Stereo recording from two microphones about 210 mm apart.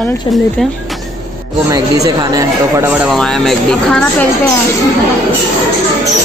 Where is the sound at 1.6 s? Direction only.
15° right (ahead or behind).